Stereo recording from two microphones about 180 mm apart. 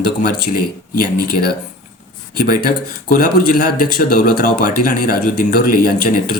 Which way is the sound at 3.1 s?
50° left (ahead or behind).